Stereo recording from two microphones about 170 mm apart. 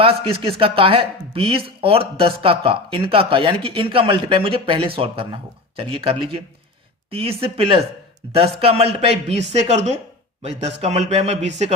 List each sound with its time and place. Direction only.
0.0 s speech: 35° right (ahead or behind)